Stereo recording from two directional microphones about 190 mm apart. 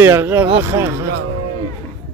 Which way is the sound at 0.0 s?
10° right (ahead or behind).